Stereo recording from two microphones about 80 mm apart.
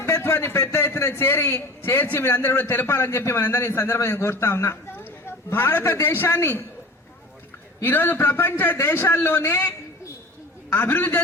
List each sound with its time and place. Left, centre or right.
0.0 s a man's voice: left
7.9 s a man's voice: left